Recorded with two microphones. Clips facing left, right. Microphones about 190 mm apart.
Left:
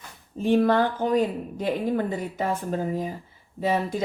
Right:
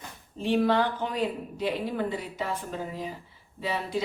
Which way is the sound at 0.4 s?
45° left (ahead or behind).